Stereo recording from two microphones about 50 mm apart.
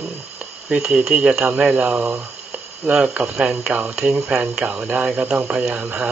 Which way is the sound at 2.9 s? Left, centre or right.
Right.